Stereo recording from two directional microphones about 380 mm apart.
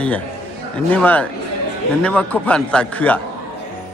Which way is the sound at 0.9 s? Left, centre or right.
Centre.